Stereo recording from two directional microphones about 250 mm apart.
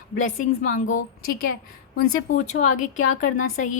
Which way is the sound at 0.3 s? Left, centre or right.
Left.